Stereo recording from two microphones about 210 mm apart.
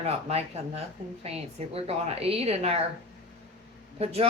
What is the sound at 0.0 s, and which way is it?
A woman's voice, 30° right (ahead or behind).